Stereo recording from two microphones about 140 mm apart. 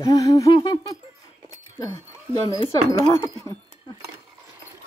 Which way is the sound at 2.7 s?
25° left (ahead or behind).